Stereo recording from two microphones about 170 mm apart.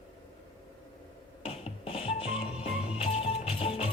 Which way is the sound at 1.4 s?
35° left (ahead or behind).